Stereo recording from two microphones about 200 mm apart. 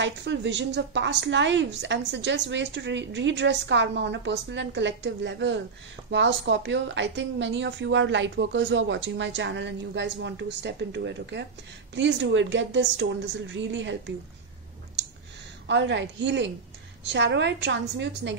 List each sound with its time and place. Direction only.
0.0 s a woman's voice: 60° right (ahead or behind)
15.6 s a woman's voice: 65° right (ahead or behind)